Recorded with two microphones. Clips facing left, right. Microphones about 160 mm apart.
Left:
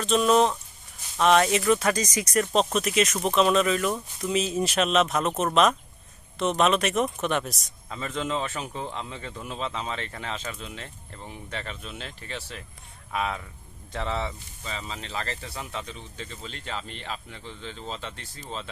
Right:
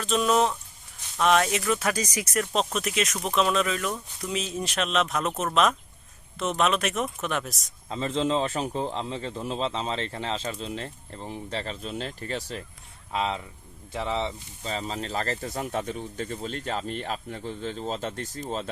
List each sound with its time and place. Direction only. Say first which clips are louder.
0.0 s speech: left 2 dB; 5° right (ahead or behind)
6.4 s speech: left 2 dB; centre (ahead or behind)
7.9 s a man's voice: right 4 dB; 30° right (ahead or behind)
13.1 s speech: right 1 dB; 25° right (ahead or behind)
14.6 s speech: right 5 dB; 35° right (ahead or behind)